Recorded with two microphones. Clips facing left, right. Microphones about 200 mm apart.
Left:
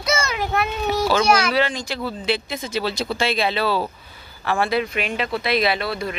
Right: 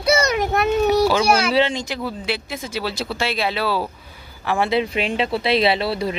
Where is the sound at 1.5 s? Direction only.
25° right (ahead or behind).